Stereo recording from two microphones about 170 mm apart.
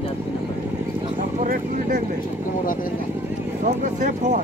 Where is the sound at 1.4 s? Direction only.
50° right (ahead or behind).